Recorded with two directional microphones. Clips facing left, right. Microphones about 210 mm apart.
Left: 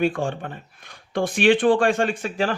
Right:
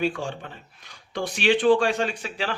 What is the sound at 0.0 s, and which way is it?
A man's voice, 55° left (ahead or behind).